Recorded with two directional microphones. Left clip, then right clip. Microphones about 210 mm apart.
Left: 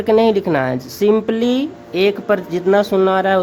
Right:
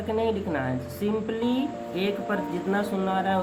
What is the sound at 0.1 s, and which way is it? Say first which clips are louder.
Speech: left 13 dB; 55° left (ahead or behind).